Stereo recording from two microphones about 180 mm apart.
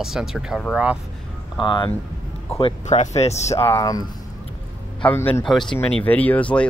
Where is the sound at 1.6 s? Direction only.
25° left (ahead or behind).